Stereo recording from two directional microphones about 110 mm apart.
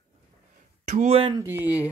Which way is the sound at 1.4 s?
20° right (ahead or behind).